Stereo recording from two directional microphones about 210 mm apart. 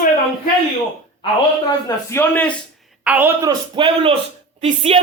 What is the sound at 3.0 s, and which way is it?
Speech, 10° right (ahead or behind).